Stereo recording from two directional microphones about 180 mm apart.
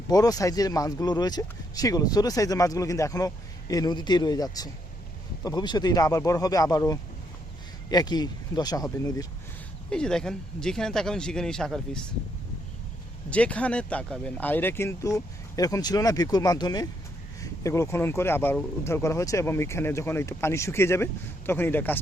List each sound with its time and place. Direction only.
0.1 s speech: 20° left (ahead or behind)
9.9 s speech: 5° left (ahead or behind)
13.3 s speech: 5° left (ahead or behind)